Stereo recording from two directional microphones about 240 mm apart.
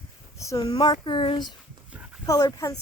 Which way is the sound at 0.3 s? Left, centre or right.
Centre.